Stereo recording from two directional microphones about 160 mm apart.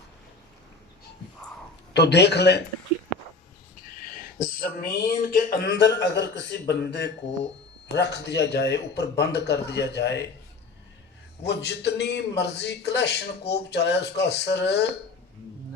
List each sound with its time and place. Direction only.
1.9 s a man's voice: 90° left
4.4 s a man's voice: 65° left (ahead or behind); by 10.2 s 90° left
11.4 s a man's voice: 90° left